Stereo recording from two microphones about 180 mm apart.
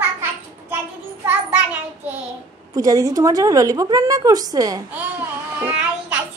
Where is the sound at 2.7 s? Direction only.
20° right (ahead or behind).